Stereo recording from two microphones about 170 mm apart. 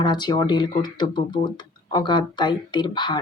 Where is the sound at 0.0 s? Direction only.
25° left (ahead or behind).